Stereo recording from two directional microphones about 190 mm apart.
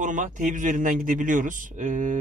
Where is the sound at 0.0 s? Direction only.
40° right (ahead or behind).